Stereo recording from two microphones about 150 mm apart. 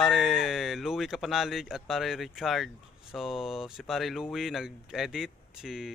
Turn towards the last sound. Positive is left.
turn(degrees=-5)  # may be behind; listen again after turning